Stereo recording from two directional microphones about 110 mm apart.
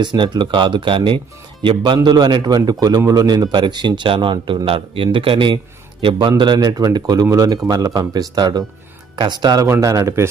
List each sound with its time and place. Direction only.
0.0 s speech: 45° right (ahead or behind)
9.6 s a man's voice: 30° right (ahead or behind)